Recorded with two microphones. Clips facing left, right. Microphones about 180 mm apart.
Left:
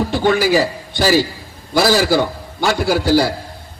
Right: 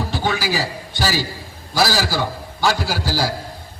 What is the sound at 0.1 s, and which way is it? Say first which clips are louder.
A man's voice: left 8 dB; 55° left (ahead or behind).